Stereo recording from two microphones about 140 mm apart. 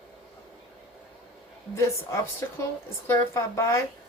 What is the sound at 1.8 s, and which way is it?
A woman's voice, 20° left (ahead or behind).